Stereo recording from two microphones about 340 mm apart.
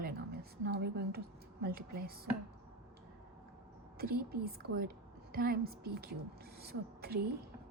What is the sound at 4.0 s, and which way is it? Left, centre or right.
A woman's voice, right.